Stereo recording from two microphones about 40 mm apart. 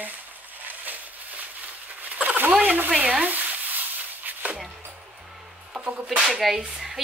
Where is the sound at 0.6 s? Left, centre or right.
Right.